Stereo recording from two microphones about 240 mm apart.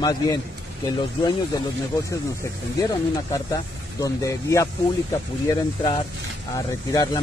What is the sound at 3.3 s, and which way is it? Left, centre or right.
Speech, centre.